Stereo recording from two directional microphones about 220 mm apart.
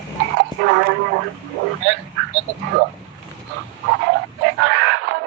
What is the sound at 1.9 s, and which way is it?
Speech, 60° right (ahead or behind).